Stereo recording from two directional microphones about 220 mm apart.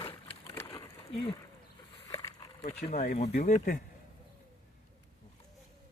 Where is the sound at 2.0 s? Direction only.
15° left (ahead or behind).